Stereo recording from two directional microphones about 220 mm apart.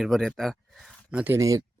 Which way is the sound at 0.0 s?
Centre (ahead or behind).